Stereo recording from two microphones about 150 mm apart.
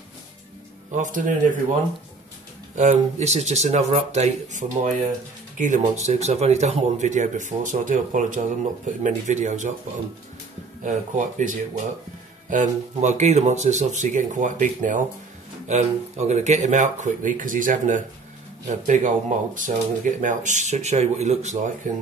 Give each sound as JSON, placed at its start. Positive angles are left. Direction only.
{"t": 0.9, "sound": "a man's voice", "side_deg": -55}
{"t": 2.7, "sound": "a man's voice", "side_deg": -50}
{"t": 10.8, "sound": "a man's voice", "side_deg": -55}